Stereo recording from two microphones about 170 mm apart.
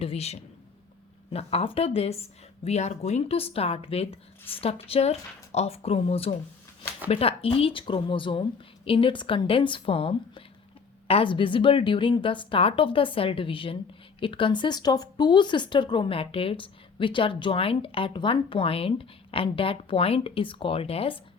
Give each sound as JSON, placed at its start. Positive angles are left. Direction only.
{"t": 0.0, "sound": "speech", "side_deg": 35}